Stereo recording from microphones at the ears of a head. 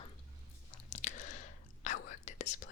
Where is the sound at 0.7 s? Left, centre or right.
Left.